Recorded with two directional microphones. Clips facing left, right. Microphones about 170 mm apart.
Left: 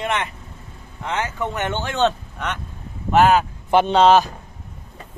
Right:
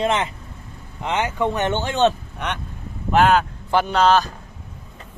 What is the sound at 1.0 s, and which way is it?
Speech, 20° right (ahead or behind).